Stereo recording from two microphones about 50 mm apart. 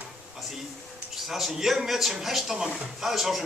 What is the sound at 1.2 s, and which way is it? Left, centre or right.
Speech, centre.